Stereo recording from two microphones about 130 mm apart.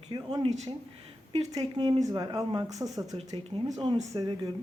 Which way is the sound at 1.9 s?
30° right (ahead or behind).